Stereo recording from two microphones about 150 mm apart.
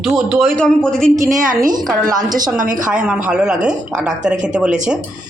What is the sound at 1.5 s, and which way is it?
Speech, 65° right (ahead or behind).